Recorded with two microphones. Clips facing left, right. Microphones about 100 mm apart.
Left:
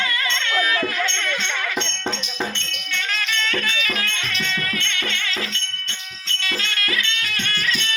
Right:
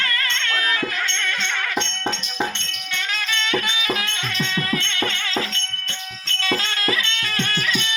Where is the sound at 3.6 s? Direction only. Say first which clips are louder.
Right 1 dB; 20° right (ahead or behind).